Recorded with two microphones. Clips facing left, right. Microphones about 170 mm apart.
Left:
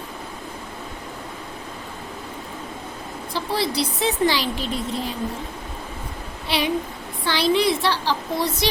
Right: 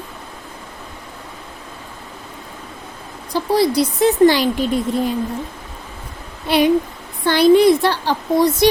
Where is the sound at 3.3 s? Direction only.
45° right (ahead or behind).